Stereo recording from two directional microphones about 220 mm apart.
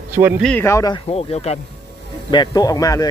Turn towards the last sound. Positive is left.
turn(degrees=15)  # may be behind; listen again after turning